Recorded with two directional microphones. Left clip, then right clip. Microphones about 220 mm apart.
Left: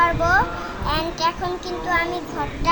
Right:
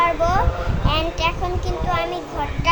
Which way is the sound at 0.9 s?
5° right (ahead or behind).